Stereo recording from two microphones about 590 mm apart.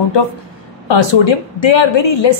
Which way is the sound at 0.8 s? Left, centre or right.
Left.